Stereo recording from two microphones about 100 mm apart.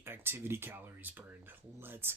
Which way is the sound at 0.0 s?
25° right (ahead or behind).